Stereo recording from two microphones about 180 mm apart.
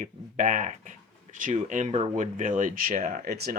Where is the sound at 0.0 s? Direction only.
45° right (ahead or behind).